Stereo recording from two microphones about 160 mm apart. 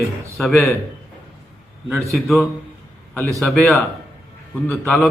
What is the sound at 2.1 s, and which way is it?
Speech, centre (ahead or behind).